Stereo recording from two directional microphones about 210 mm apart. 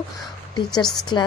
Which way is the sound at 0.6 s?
20° left (ahead or behind).